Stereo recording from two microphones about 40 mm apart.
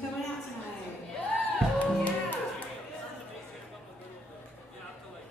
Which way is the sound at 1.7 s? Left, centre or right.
Left.